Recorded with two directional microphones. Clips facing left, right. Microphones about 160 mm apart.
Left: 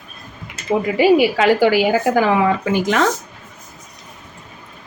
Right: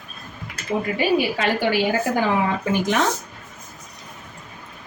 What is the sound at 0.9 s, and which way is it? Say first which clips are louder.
Speech: left 9 dB; 90° left.